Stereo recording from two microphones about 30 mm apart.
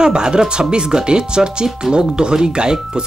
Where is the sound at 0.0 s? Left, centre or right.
Right.